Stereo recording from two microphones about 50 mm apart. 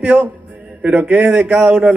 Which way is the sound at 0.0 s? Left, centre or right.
Right.